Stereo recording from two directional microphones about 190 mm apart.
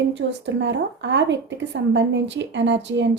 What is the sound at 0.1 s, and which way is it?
Speech, 70° right (ahead or behind).